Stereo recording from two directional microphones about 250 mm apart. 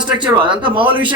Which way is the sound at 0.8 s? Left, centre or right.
Centre.